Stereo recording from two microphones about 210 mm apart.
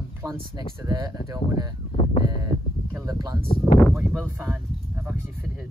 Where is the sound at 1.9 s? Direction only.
30° left (ahead or behind).